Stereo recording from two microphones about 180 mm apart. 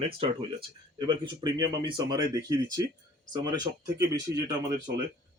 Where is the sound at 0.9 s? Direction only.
25° right (ahead or behind).